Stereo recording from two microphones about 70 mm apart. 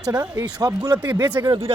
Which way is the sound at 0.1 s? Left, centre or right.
Right.